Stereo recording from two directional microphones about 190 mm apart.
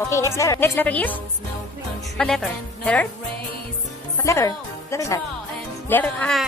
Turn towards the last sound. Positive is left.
turn(degrees=5)  # may be behind; listen again after turning